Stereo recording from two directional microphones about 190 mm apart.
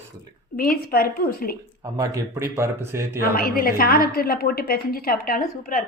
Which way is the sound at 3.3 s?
50° left (ahead or behind).